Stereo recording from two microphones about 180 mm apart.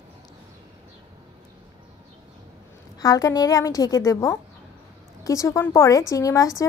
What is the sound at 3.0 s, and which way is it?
A woman's voice, 20° left (ahead or behind).